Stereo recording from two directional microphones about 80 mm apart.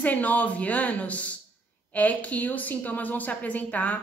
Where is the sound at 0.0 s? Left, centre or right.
Centre.